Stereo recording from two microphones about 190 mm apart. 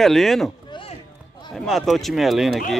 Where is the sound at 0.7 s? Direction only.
30° left (ahead or behind).